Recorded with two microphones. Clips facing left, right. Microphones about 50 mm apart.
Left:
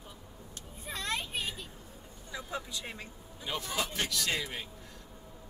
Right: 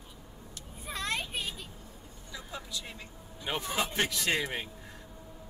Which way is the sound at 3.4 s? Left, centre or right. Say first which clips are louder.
Right 2 dB; right.